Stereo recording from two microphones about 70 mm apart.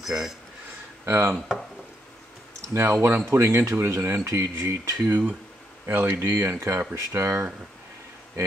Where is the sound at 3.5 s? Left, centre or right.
Right.